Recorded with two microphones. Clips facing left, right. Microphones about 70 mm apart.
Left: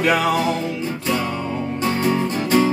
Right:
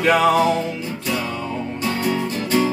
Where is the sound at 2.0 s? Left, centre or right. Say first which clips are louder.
Left 2 dB; left.